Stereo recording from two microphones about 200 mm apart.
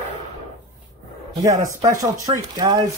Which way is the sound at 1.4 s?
15° right (ahead or behind).